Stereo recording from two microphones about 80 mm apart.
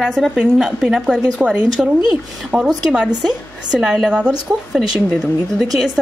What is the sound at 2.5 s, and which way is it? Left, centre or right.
Speech, centre.